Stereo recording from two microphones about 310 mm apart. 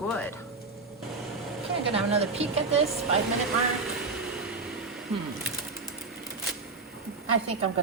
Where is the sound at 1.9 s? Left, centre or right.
Centre.